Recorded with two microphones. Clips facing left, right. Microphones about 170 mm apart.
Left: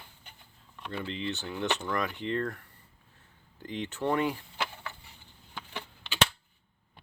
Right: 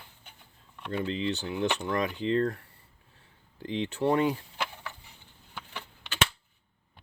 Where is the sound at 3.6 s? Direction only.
30° right (ahead or behind).